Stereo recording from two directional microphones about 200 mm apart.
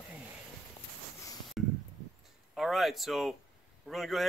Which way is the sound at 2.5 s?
Centre (ahead or behind).